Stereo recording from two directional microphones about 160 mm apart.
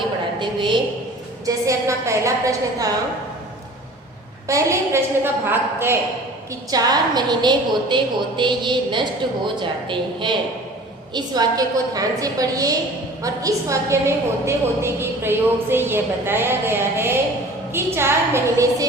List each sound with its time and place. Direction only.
0.3 s a woman's voice: 30° right (ahead or behind)
1.5 s a woman's voice: 20° right (ahead or behind)
4.4 s a woman's voice: 20° right (ahead or behind)